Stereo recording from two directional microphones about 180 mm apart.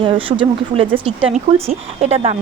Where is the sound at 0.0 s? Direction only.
30° right (ahead or behind).